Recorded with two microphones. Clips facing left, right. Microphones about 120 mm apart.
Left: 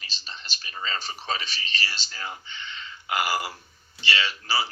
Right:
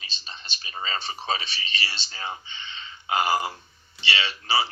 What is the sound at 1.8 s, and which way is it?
A man's voice, 25° right (ahead or behind).